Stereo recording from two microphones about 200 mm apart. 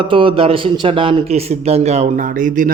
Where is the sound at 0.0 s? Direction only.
25° right (ahead or behind).